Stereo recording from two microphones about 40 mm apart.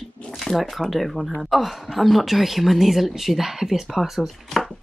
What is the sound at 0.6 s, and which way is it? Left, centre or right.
Speech, centre.